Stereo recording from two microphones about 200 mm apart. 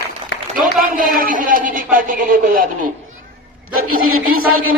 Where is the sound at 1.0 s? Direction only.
45° right (ahead or behind).